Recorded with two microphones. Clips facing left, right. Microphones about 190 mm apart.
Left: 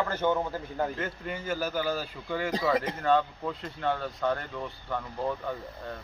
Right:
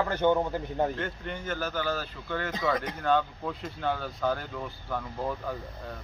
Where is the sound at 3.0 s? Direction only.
Centre (ahead or behind).